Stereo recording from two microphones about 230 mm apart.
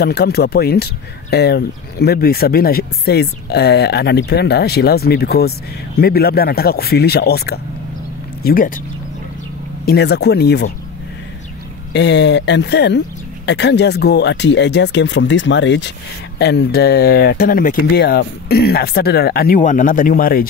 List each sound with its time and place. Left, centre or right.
0.0 s speech: left
9.8 s speech: left
11.9 s speech: left